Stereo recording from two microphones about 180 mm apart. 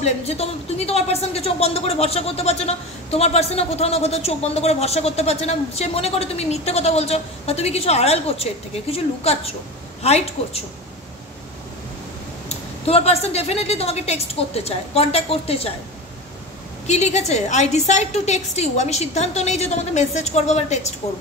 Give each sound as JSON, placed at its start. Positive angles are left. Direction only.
{"t": 0.0, "sound": "speech", "side_deg": 35}
{"t": 12.4, "sound": "speech", "side_deg": 35}
{"t": 16.8, "sound": "speech", "side_deg": 40}